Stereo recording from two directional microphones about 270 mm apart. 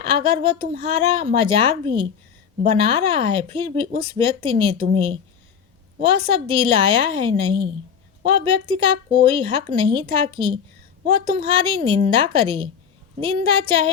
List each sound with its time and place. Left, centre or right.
0.0 s a child's voice: centre